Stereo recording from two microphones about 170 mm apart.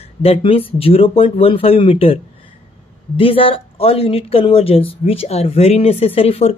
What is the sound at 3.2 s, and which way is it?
Speech, 30° left (ahead or behind).